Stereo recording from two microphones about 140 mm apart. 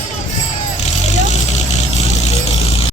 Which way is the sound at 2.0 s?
50° left (ahead or behind).